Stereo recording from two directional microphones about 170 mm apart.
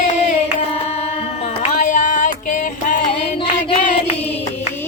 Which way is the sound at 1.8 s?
50° left (ahead or behind).